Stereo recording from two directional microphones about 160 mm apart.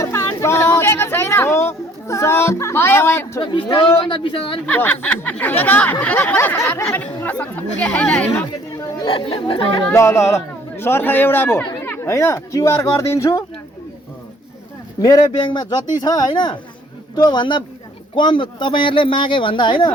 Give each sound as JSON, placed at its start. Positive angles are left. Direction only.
{"t": 0.0, "sound": "a sound", "side_deg": 20}
{"t": 3.4, "sound": "a man's voice", "side_deg": 35}
{"t": 4.6, "sound": "a man's voice", "side_deg": 10}
{"t": 9.0, "sound": "a man's voice", "side_deg": 35}
{"t": 9.9, "sound": "a man's voice", "side_deg": 15}
{"t": 15.3, "sound": "a man's voice", "side_deg": 30}